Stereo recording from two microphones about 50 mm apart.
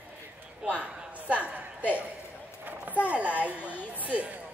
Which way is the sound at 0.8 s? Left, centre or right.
Right.